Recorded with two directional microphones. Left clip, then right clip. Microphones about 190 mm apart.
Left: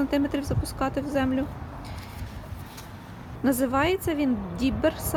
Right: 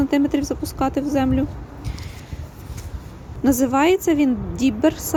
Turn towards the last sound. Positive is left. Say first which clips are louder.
# right 6 dB
turn(degrees=-15)  # may be behind; listen again after turning